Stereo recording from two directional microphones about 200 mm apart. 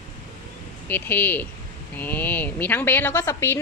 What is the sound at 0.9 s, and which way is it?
A woman's voice, 10° left (ahead or behind).